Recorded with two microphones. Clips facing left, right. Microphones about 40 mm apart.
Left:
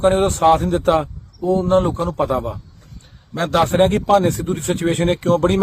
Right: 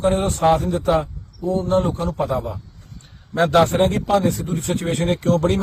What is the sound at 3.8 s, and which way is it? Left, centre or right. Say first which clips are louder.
A man's voice: left 3 dB; left.